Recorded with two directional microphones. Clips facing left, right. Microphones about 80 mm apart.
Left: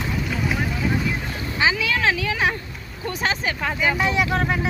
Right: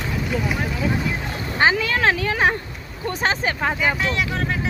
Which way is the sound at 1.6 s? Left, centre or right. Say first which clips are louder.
Right 3 dB; right.